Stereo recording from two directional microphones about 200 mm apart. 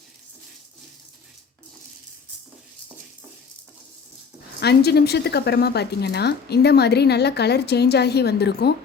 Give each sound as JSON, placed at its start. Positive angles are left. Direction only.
{"t": 4.6, "sound": "speech", "side_deg": 55}